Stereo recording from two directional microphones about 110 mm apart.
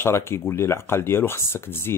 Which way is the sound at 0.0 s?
20° left (ahead or behind).